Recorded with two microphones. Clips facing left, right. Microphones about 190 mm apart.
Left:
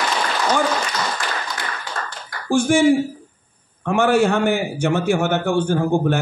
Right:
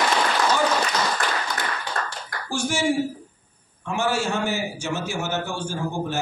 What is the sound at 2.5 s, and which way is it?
A man's voice, 55° left (ahead or behind).